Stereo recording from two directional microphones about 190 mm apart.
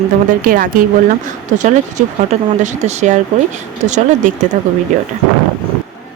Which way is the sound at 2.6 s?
40° right (ahead or behind).